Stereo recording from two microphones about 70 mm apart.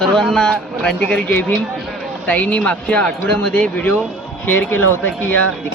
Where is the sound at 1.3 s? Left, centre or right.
Left.